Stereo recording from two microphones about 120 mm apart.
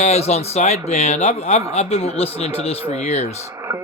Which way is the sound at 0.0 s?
65° left (ahead or behind).